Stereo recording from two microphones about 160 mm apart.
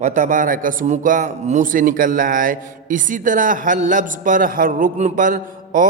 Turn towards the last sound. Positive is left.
turn(degrees=-55)  # may be behind; listen again after turning